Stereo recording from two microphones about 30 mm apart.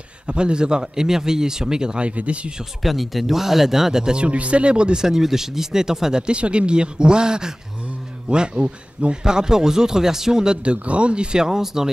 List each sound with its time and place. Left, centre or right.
0.3 s a man's voice: right
2.0 s speech: right
2.8 s speech: centre
4.0 s a man's voice: right
4.3 s speech: right
5.0 s speech: centre
6.2 s a man's voice: right
10.6 s speech: right
11.3 s speech: centre